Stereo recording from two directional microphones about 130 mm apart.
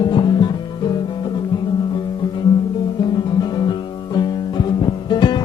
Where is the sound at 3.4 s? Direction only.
35° left (ahead or behind).